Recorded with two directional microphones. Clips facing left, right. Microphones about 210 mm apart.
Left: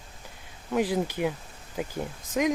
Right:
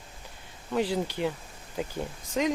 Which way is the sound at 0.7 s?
10° left (ahead or behind).